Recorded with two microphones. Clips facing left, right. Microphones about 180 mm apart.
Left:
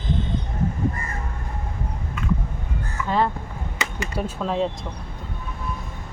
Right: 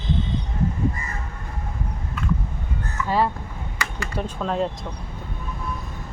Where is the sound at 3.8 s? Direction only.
20° left (ahead or behind).